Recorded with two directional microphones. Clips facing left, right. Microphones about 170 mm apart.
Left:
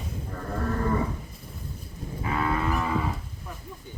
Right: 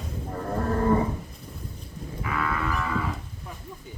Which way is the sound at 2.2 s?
30° left (ahead or behind).